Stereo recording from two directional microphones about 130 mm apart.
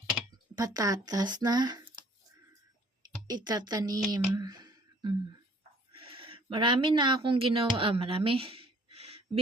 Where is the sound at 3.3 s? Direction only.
30° right (ahead or behind).